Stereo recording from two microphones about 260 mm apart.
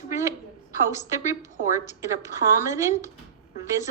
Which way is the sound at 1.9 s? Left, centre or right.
Centre.